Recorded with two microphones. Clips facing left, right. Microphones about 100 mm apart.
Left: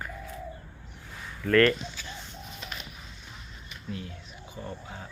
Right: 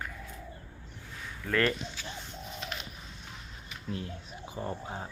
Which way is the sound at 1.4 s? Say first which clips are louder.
Left 7 dB; 10° right (ahead or behind).